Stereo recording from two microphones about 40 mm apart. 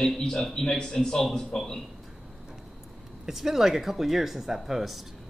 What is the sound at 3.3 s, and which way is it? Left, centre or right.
Speech, centre.